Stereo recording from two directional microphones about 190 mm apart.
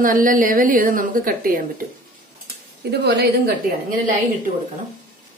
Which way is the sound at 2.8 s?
60° right (ahead or behind).